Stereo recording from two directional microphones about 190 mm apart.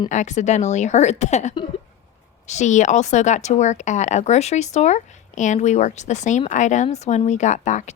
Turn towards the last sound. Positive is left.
turn(degrees=40)  # may be behind; listen again after turning